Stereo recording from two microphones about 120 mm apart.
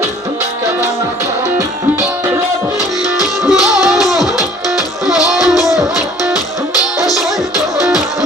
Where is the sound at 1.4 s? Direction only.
25° right (ahead or behind).